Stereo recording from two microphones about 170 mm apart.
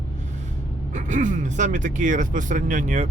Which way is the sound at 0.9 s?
50° right (ahead or behind).